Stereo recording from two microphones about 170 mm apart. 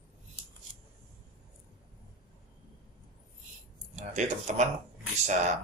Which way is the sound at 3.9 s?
45° right (ahead or behind).